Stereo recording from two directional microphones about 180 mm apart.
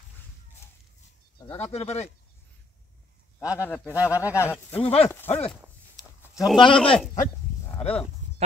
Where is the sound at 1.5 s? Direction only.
35° left (ahead or behind).